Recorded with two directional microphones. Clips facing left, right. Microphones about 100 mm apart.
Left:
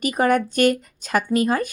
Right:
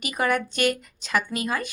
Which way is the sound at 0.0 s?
45° left (ahead or behind).